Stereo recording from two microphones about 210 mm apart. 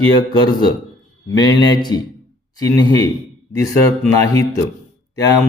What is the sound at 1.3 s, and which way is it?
A man's voice, 20° left (ahead or behind).